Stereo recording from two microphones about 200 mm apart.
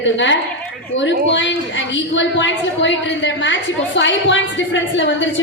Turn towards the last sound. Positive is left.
turn(degrees=65)  # may be behind; listen again after turning